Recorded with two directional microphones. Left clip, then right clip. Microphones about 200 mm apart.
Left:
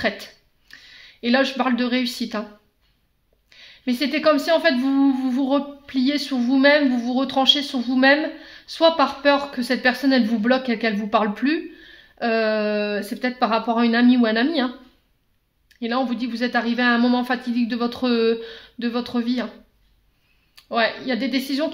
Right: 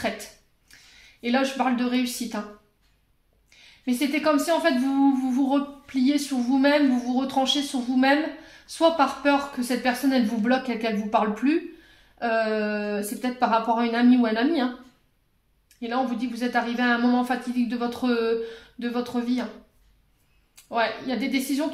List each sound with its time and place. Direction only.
0.7 s a sound: 45° left (ahead or behind)
1.2 s a woman's voice: 45° left (ahead or behind)
3.4 s a woman's voice: 45° left (ahead or behind)
15.8 s a woman's voice: 45° left (ahead or behind)
20.5 s a woman's voice: 45° left (ahead or behind)